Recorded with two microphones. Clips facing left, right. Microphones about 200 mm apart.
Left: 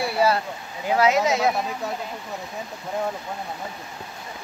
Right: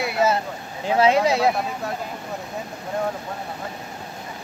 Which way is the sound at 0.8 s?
30° right (ahead or behind).